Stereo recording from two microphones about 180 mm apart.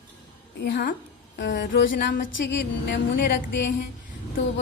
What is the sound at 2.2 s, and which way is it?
A woman's voice, 85° left.